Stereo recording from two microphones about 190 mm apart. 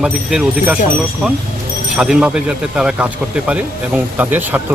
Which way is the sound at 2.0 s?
5° right (ahead or behind).